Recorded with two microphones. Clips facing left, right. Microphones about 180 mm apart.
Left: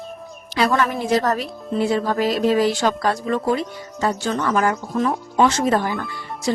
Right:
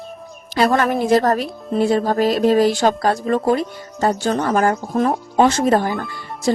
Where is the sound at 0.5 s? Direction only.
45° right (ahead or behind).